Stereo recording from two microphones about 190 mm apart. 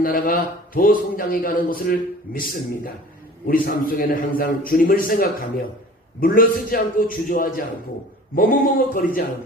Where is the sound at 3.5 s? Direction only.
50° left (ahead or behind).